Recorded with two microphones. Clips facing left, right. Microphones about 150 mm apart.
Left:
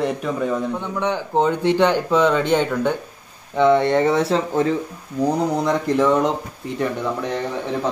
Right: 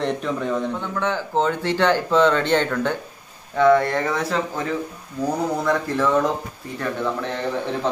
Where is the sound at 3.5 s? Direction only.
20° left (ahead or behind).